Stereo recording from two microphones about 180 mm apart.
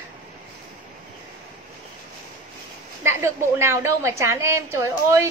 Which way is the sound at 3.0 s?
15° right (ahead or behind).